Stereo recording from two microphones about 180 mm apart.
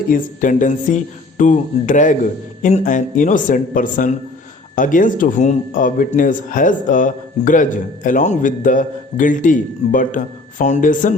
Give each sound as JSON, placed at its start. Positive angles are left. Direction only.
{"t": 0.1, "sound": "speech", "side_deg": 45}